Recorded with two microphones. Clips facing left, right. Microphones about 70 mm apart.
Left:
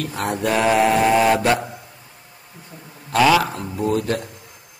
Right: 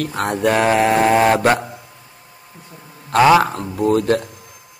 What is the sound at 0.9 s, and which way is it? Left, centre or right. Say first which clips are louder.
Mantra: right 2 dB; right.